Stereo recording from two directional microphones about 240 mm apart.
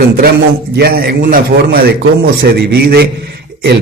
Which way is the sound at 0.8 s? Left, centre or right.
Right.